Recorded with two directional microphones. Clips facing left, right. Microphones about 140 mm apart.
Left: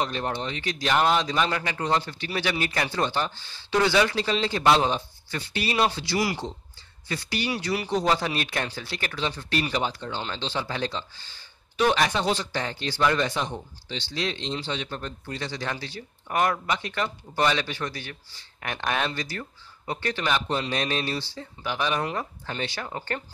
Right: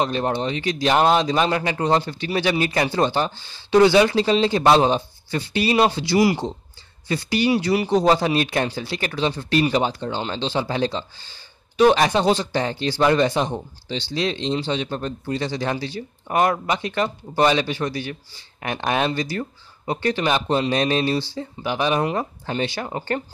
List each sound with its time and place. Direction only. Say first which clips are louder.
0.0 s speech: right 6 dB; 25° right (ahead or behind)